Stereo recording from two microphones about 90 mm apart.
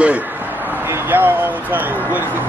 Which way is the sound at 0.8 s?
25° right (ahead or behind).